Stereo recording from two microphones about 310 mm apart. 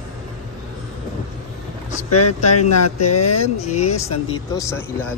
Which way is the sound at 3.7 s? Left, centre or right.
Left.